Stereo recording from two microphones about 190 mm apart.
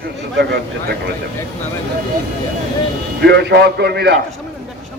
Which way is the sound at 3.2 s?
60° right (ahead or behind).